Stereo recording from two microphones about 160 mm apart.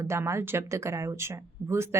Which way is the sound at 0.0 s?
15° right (ahead or behind).